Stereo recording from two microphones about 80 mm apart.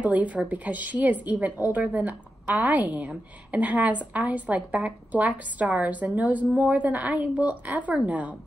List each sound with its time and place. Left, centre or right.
0.0 s a woman's voice: centre